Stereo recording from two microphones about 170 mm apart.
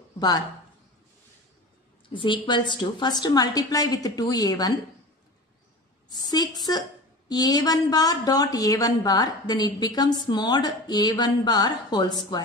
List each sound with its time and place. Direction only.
2.1 s speech: 30° left (ahead or behind)
6.0 s speech: 25° left (ahead or behind)